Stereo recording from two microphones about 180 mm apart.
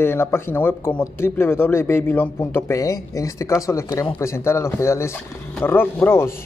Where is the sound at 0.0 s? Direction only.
15° left (ahead or behind).